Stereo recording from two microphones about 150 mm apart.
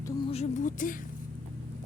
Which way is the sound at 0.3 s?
50° left (ahead or behind).